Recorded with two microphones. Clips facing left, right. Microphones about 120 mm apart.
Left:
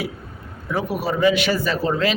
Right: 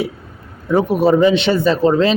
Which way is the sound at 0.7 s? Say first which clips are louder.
Right 10 dB; 25° right (ahead or behind).